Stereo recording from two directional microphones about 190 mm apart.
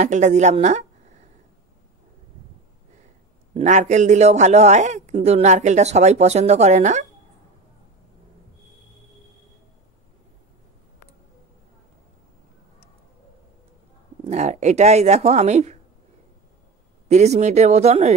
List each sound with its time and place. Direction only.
0.0 s speech: 40° right (ahead or behind)
3.5 s speech: 40° right (ahead or behind)
14.2 s speech: 35° right (ahead or behind)
17.1 s speech: 35° right (ahead or behind)